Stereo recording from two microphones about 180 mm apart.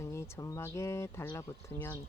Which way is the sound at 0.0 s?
15° left (ahead or behind).